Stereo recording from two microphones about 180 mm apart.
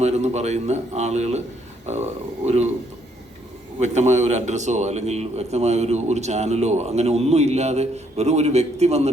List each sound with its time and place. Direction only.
0.0 s a man's voice: 40° right (ahead or behind)
3.8 s a man's voice: 40° right (ahead or behind)